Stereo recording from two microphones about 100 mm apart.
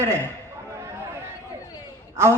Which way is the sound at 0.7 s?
30° right (ahead or behind).